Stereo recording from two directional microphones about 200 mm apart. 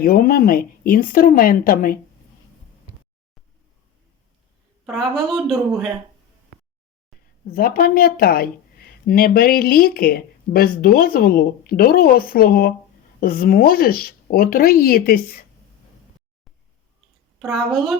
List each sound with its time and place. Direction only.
0.0 s speech: 50° left (ahead or behind)
4.9 s speech: centre (ahead or behind)
7.4 s speech: 45° left (ahead or behind)
17.4 s speech: centre (ahead or behind)